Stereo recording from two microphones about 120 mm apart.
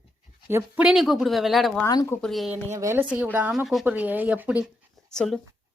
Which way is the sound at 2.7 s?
25° right (ahead or behind).